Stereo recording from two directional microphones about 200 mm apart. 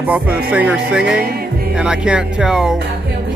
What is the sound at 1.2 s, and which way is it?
Music, 50° right (ahead or behind).